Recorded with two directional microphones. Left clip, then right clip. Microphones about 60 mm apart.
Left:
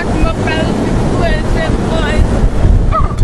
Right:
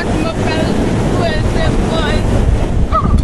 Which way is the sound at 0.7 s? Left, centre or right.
Right.